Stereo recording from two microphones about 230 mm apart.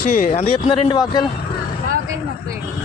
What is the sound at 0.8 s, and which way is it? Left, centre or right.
Speech, centre.